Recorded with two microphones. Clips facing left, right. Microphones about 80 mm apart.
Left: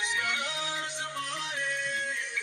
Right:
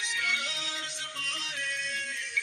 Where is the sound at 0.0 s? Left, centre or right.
Left.